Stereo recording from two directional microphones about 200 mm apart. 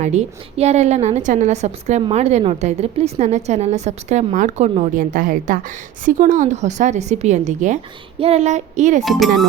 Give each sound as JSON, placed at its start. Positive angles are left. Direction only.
{"t": 0.0, "sound": "a woman's voice", "side_deg": -35}
{"t": 9.0, "sound": "speech", "side_deg": 0}